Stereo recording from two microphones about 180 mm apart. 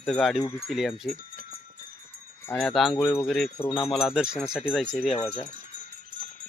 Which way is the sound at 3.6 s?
25° left (ahead or behind).